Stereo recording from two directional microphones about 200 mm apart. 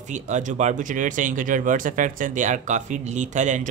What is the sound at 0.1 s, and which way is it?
Speech, 40° right (ahead or behind).